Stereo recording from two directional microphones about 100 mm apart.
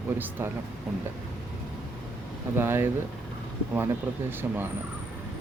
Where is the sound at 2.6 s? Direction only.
25° right (ahead or behind).